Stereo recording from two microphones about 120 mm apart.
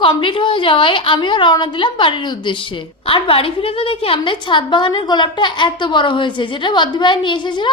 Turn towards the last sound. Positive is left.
turn(degrees=40)  # may be behind; listen again after turning